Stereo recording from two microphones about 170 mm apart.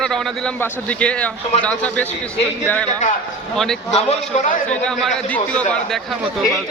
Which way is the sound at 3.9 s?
35° left (ahead or behind).